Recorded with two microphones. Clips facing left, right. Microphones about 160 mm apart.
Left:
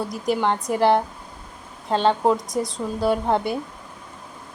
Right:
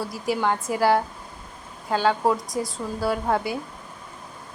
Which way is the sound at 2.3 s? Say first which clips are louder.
Left 3 dB; centre (ahead or behind).